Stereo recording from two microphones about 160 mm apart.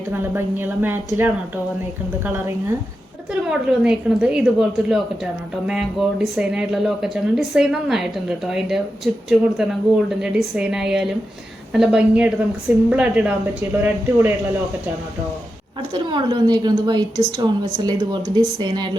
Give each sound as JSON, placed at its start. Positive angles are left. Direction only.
{"t": 0.1, "sound": "a woman's voice", "side_deg": -15}
{"t": 3.7, "sound": "a woman's voice", "side_deg": -5}
{"t": 15.9, "sound": "a woman's voice", "side_deg": -30}